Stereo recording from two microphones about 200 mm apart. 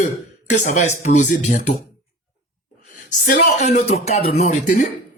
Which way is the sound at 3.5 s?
35° left (ahead or behind).